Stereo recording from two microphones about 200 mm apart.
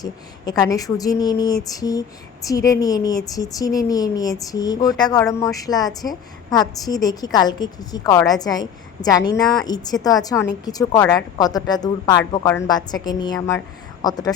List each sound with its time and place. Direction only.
0.6 s speech: 15° left (ahead or behind)